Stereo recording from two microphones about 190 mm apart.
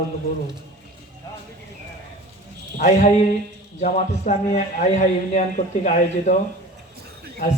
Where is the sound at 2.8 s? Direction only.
40° left (ahead or behind).